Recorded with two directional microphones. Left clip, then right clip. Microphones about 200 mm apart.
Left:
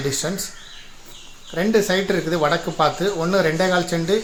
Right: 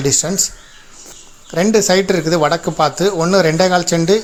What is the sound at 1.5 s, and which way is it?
Speech, 45° right (ahead or behind).